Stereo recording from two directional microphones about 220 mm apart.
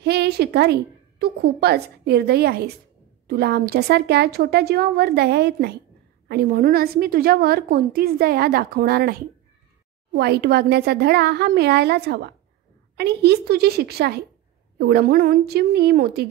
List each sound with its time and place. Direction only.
0.0 s a woman's voice: 50° right (ahead or behind)
10.1 s a woman's voice: 45° right (ahead or behind)